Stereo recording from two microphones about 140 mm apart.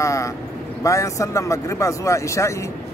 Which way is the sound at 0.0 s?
20° left (ahead or behind).